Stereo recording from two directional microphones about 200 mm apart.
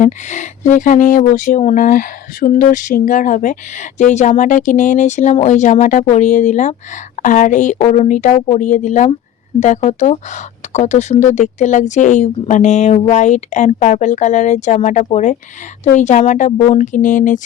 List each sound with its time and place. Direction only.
0.0 s speech: 35° left (ahead or behind)